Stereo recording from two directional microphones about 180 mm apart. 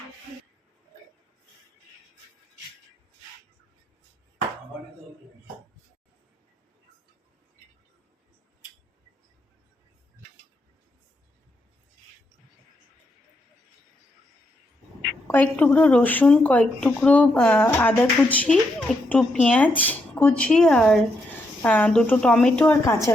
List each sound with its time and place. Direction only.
15.3 s speech: 10° left (ahead or behind)
22.8 s speech: 15° left (ahead or behind)